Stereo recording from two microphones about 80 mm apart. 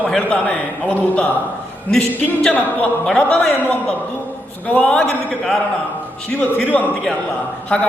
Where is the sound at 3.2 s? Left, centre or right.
Centre.